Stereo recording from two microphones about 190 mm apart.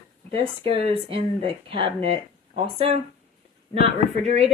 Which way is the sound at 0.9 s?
30° right (ahead or behind).